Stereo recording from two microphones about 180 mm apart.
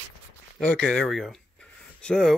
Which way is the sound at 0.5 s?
5° left (ahead or behind).